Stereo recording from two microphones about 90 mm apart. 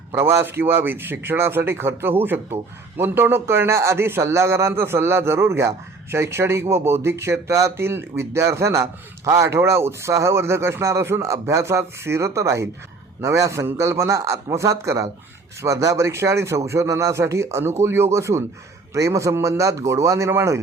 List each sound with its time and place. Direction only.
0.1 s a man's voice: 30° right (ahead or behind)